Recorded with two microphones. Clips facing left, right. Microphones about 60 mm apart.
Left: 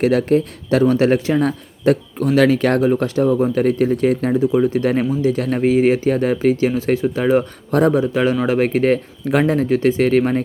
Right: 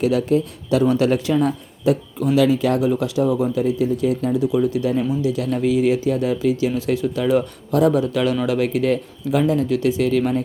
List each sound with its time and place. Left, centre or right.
0.0 s speech: left
2.9 s speech: left
3.6 s speech: left
4.4 s speech: left
4.8 s speech: left